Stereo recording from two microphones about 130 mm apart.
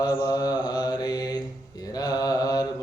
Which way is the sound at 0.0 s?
30° left (ahead or behind).